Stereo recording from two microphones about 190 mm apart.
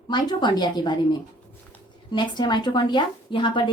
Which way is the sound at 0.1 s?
25° left (ahead or behind).